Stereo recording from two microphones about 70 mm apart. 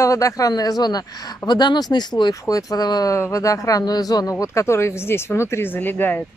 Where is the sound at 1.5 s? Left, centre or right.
Left.